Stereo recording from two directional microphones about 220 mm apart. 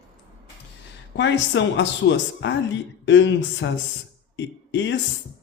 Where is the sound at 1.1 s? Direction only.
55° left (ahead or behind).